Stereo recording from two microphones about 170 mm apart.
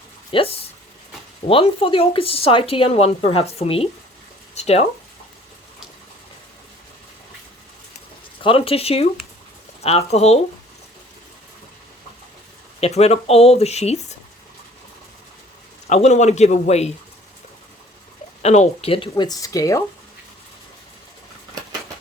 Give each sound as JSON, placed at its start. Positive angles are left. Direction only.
{"t": 0.3, "sound": "speech", "side_deg": 30}
{"t": 8.4, "sound": "speech", "side_deg": 35}
{"t": 12.8, "sound": "speech", "side_deg": 40}
{"t": 15.9, "sound": "speech", "side_deg": 40}
{"t": 18.4, "sound": "speech", "side_deg": 40}